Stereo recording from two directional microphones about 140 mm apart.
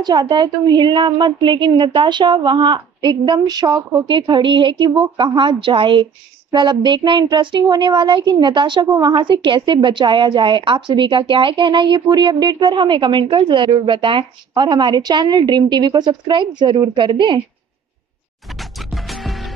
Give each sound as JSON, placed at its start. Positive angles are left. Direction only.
{"t": 0.0, "sound": "a woman's voice", "side_deg": -30}
{"t": 18.5, "sound": "music", "side_deg": 0}